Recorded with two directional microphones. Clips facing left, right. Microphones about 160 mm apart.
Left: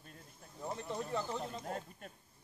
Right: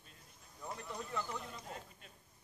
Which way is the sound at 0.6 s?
25° left (ahead or behind).